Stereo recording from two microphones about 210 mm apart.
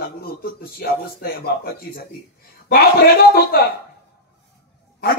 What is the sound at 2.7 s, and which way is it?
A man's voice, 50° left (ahead or behind).